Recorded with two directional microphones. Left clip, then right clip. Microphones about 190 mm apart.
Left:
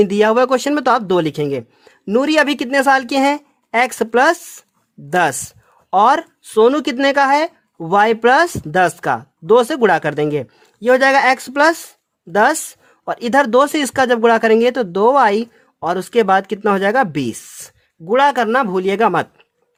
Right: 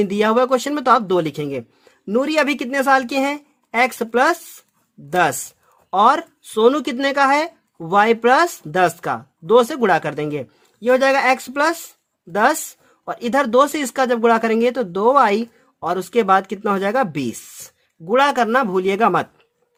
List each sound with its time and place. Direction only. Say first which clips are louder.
0.0 s speech: left 4 dB; 30° left (ahead or behind)